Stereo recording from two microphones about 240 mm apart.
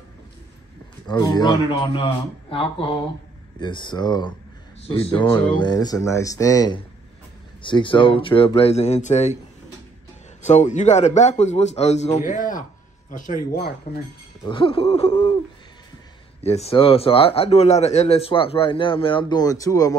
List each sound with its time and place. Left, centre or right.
1.0 s speech: centre
10.4 s speech: left
14.4 s speech: left
16.4 s speech: left